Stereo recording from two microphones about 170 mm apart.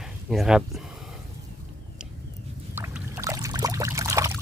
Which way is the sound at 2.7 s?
15° right (ahead or behind).